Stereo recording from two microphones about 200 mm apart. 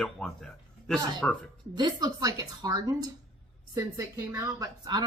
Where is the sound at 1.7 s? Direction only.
20° right (ahead or behind).